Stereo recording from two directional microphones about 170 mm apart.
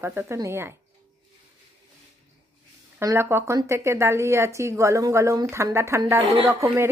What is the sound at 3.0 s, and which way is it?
Speech, 15° right (ahead or behind).